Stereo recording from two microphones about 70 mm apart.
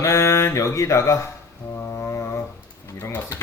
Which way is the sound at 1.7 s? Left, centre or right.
Left.